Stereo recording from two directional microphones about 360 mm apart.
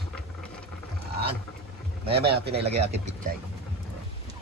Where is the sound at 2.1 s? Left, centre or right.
Centre.